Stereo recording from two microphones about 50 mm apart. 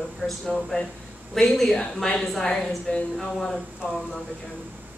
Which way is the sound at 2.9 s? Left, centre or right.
Left.